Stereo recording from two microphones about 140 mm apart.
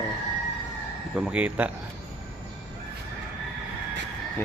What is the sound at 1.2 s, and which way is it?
Speech, 5° right (ahead or behind).